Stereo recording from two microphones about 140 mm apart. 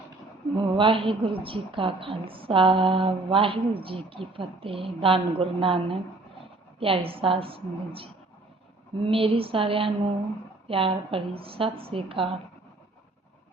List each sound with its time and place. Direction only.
0.5 s a woman's voice: 40° right (ahead or behind)